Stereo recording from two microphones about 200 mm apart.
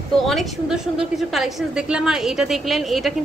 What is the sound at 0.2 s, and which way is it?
A woman's voice, centre (ahead or behind).